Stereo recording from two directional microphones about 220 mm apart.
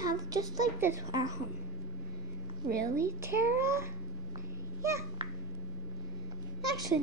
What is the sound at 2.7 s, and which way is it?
A woman's voice, 15° right (ahead or behind).